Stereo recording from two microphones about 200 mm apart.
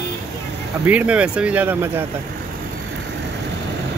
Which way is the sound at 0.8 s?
5° right (ahead or behind).